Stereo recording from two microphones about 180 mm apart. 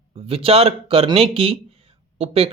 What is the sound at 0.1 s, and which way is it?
Speech, 30° right (ahead or behind).